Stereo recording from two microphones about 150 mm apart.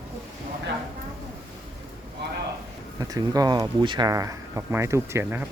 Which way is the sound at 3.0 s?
25° right (ahead or behind).